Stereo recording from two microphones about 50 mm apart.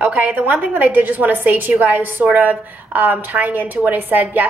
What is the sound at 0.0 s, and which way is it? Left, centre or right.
A woman's voice, right.